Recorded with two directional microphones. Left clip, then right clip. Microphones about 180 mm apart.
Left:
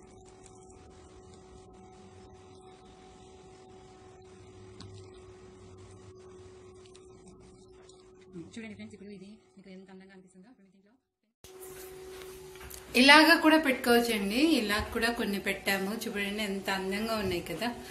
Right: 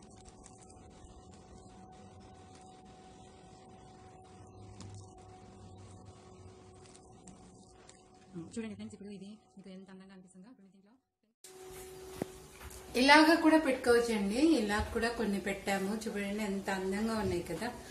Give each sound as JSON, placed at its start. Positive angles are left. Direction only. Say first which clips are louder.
{"t": 8.5, "sound": "speech", "louder": "right 4 dB", "side_deg": -45}
{"t": 12.9, "sound": "a woman's voice", "louder": "left 4 dB", "side_deg": 15}